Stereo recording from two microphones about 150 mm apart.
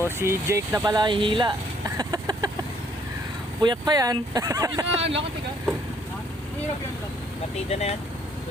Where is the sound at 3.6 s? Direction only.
30° right (ahead or behind).